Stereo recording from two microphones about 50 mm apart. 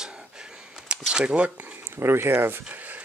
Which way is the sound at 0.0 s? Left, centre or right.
Centre.